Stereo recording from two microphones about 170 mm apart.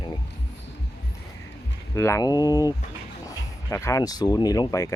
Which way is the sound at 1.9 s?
20° left (ahead or behind).